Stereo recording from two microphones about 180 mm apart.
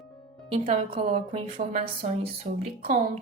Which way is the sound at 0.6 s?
30° right (ahead or behind).